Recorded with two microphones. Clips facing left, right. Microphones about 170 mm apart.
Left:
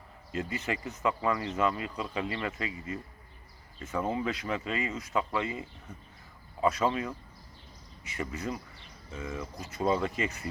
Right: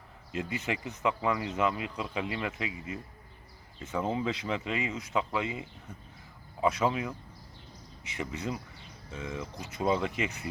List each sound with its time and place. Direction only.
0.3 s speech: 15° right (ahead or behind)